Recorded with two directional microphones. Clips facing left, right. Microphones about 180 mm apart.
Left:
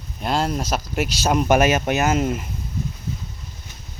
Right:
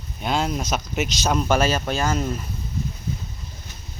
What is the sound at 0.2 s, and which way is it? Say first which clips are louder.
Speech: left 1 dB; centre (ahead or behind).